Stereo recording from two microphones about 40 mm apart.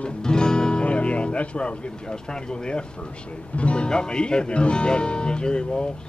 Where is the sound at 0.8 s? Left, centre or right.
Left.